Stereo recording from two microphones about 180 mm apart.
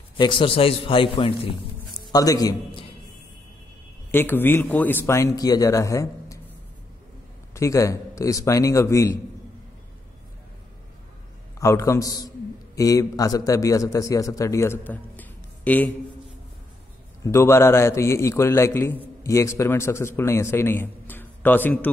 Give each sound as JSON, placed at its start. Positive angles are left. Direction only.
{"t": 0.2, "sound": "a man's voice", "side_deg": 30}
{"t": 4.1, "sound": "a man's voice", "side_deg": 10}
{"t": 7.5, "sound": "a man's voice", "side_deg": 15}
{"t": 11.6, "sound": "a man's voice", "side_deg": 15}
{"t": 17.2, "sound": "a man's voice", "side_deg": 15}